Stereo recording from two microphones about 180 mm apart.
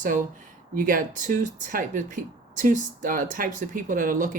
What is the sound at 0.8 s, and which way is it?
Speech, 50° right (ahead or behind).